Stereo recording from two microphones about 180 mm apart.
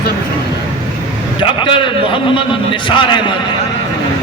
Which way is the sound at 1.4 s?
25° left (ahead or behind).